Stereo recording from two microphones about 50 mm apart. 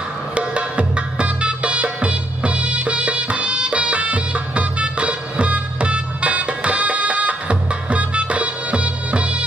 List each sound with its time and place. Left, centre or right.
0.3 s music: right